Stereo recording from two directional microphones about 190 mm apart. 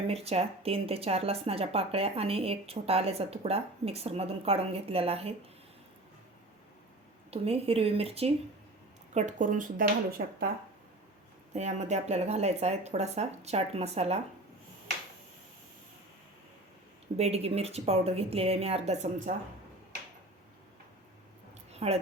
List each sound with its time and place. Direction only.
0.1 s speech: 30° right (ahead or behind)
7.3 s speech: 30° right (ahead or behind); by 10.5 s 50° right (ahead or behind)
11.5 s speech: 35° right (ahead or behind)
17.2 s speech: 35° right (ahead or behind)
21.7 s a sound: 35° right (ahead or behind)